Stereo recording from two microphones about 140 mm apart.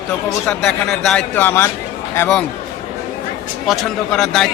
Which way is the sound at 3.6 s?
Centre (ahead or behind).